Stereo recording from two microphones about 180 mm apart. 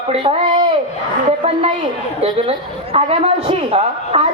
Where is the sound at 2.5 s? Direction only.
35° right (ahead or behind).